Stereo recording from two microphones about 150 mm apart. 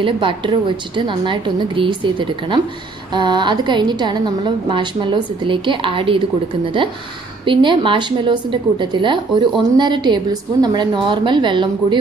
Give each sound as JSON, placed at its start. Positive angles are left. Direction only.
{"t": 0.0, "sound": "a woman's voice", "side_deg": -35}